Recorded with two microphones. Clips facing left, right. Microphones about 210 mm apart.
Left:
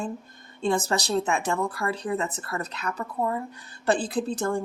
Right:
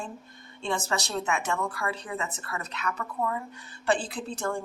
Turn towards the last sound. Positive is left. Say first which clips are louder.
# left 6 dB
turn(degrees=40)  # may be behind; listen again after turning